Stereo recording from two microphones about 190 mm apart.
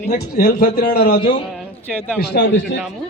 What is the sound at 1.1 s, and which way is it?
Speech, 30° left (ahead or behind).